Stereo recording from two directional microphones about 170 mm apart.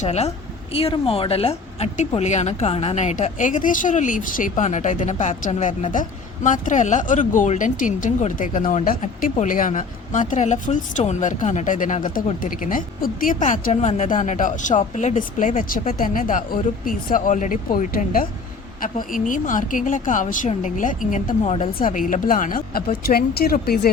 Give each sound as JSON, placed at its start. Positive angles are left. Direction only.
{"t": 0.0, "sound": "a woman's voice", "side_deg": 40}
{"t": 21.8, "sound": "speech", "side_deg": 50}